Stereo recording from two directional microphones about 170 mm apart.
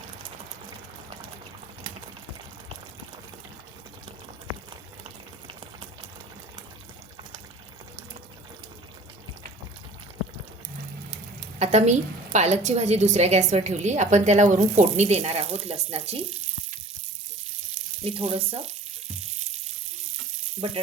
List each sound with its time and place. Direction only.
11.6 s a woman's voice: 40° right (ahead or behind)
18.0 s frying: 35° right (ahead or behind)
20.6 s frying: 35° right (ahead or behind)